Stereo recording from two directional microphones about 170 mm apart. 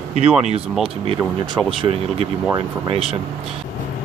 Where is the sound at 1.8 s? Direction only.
35° right (ahead or behind).